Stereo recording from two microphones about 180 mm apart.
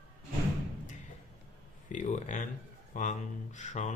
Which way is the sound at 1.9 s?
45° left (ahead or behind).